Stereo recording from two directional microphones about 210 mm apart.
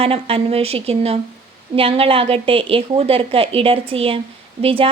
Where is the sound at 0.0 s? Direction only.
25° right (ahead or behind).